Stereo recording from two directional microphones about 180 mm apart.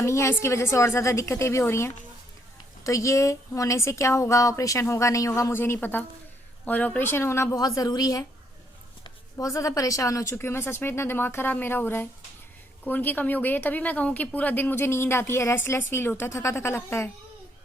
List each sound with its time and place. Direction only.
0.0 s a woman's voice: 15° left (ahead or behind)